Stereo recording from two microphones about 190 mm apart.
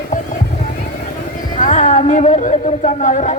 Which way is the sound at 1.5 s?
40° left (ahead or behind).